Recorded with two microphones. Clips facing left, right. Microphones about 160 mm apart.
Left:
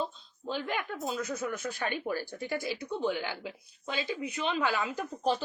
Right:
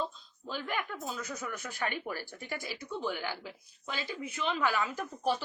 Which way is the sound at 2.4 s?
20° left (ahead or behind).